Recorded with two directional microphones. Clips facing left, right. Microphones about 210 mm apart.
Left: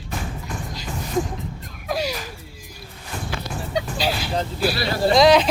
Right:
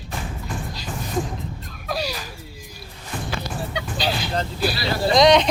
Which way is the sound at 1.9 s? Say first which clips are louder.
Left 2 dB; 20° left (ahead or behind).